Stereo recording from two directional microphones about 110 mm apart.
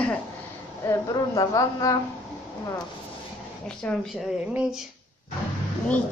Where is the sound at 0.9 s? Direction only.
35° left (ahead or behind).